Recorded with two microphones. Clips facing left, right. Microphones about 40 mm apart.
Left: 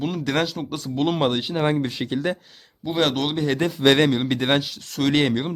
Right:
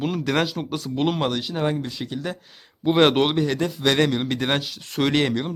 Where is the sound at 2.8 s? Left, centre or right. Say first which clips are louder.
Right 5 dB; right.